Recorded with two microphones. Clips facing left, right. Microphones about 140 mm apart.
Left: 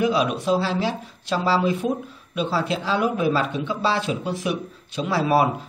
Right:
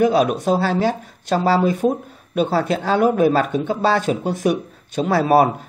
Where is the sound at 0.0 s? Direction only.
45° right (ahead or behind).